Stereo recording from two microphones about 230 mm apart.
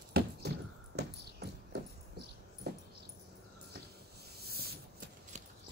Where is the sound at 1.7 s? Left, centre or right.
Right.